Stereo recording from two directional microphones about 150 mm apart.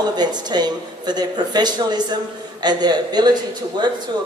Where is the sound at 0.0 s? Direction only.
30° right (ahead or behind).